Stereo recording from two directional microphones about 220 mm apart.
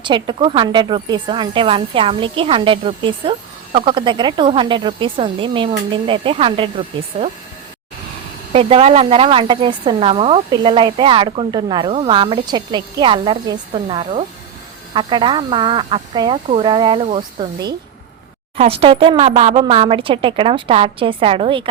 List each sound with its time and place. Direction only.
0.0 s speech: 20° right (ahead or behind)
8.5 s speech: 25° right (ahead or behind)